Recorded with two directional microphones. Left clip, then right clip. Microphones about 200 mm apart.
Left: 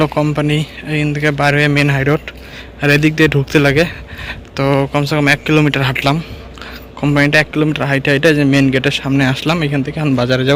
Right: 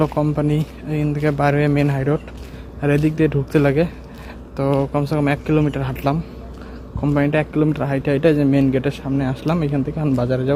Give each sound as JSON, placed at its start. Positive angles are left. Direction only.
{"t": 0.0, "sound": "speech", "side_deg": 0}
{"t": 2.0, "sound": "a man's voice", "side_deg": 15}